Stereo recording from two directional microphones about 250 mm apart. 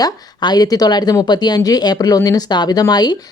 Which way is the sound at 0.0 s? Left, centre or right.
Centre.